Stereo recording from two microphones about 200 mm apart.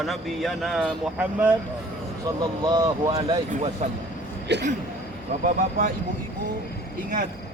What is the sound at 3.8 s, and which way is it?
Speech, 40° right (ahead or behind).